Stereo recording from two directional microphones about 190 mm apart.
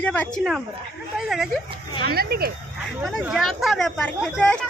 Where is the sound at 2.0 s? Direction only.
55° right (ahead or behind).